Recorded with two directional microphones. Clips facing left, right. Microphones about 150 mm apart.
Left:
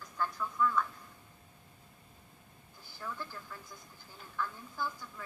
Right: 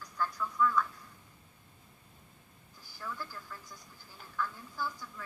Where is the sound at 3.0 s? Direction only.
15° left (ahead or behind).